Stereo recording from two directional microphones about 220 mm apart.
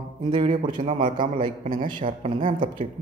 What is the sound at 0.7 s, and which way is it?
A man's voice, 40° right (ahead or behind).